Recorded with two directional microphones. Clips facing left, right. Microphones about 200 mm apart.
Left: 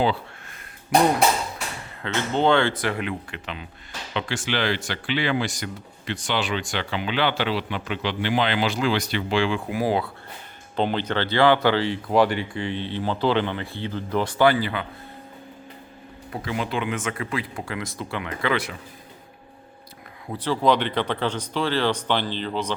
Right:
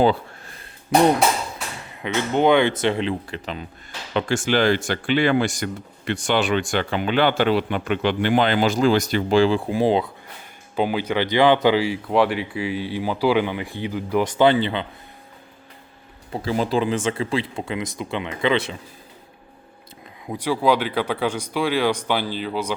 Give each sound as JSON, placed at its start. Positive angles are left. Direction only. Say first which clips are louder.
{"t": 2.0, "sound": "speech", "louder": "right 3 dB", "side_deg": -15}
{"t": 10.8, "sound": "speech", "louder": "right 2 dB", "side_deg": -10}
{"t": 16.3, "sound": "speech", "louder": "right 6 dB", "side_deg": -30}
{"t": 20.2, "sound": "speech", "louder": "right 1 dB", "side_deg": -15}